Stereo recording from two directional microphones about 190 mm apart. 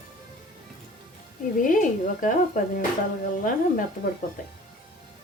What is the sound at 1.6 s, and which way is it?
A woman's voice, 45° left (ahead or behind).